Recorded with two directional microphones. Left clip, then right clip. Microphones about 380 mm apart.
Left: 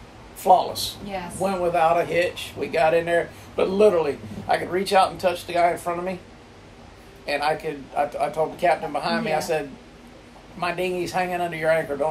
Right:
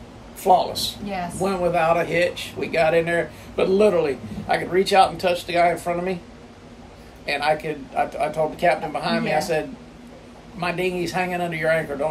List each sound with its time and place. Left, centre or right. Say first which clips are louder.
0.4 s speech: even; centre
7.2 s speech: right 2 dB; centre
10.6 s speech: right 1 dB; centre